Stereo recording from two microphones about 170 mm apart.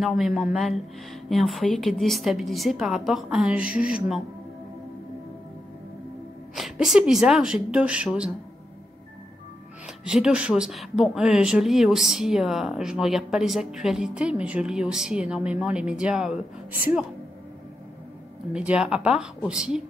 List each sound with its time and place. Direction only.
0.0 s speech: centre (ahead or behind)
6.5 s speech: centre (ahead or behind)
9.8 s speech: 5° right (ahead or behind)
18.5 s speech: 5° right (ahead or behind)